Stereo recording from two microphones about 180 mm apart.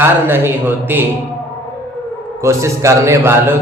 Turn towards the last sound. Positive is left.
turn(degrees=-15)  # may be behind; listen again after turning